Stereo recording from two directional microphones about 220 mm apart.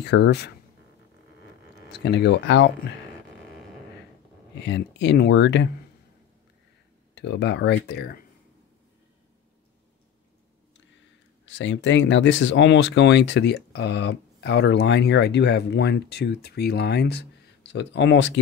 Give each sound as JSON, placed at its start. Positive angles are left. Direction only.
{"t": 0.0, "sound": "speech", "side_deg": 50}
{"t": 1.9, "sound": "speech", "side_deg": 50}
{"t": 4.6, "sound": "speech", "side_deg": 50}
{"t": 7.2, "sound": "speech", "side_deg": 50}
{"t": 11.4, "sound": "speech", "side_deg": 55}